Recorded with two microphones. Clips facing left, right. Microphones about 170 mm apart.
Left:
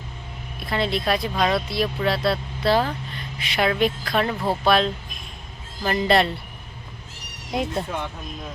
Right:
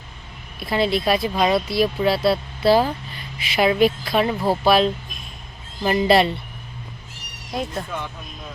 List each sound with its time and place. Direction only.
0.6 s a woman's voice: 5° right (ahead or behind)
7.5 s speech: 15° left (ahead or behind)